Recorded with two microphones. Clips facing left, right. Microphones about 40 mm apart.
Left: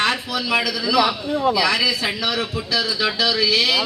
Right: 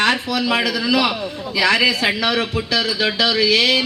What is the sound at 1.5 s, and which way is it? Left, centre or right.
Speech, right.